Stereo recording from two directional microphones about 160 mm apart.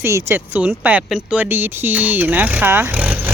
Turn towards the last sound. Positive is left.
turn(degrees=-10)  # may be behind; listen again after turning